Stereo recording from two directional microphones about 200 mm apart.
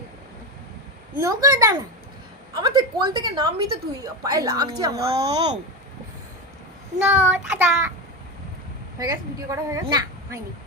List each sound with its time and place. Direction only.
1.2 s a woman's voice: 20° right (ahead or behind)
5.0 s a woman's voice: 30° right (ahead or behind)
7.1 s a woman's voice: 10° right (ahead or behind)
9.0 s a woman's voice: 15° right (ahead or behind)